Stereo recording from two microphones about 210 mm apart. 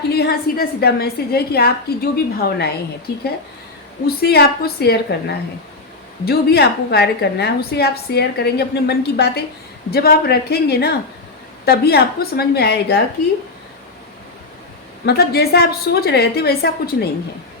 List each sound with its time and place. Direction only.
0.1 s a woman's voice: 50° left (ahead or behind)
6.2 s a woman's voice: 50° left (ahead or behind)
15.0 s a woman's voice: 50° left (ahead or behind)